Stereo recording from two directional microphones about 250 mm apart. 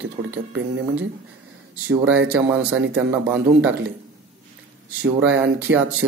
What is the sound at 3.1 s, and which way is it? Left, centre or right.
Speech, centre.